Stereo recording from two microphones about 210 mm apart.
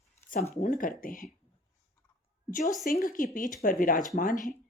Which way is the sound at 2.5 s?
40° left (ahead or behind).